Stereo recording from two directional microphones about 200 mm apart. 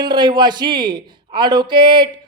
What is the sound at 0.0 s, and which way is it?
A man's voice, 20° right (ahead or behind).